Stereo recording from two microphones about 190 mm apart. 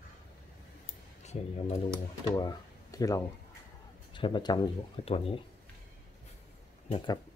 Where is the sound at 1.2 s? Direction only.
35° left (ahead or behind).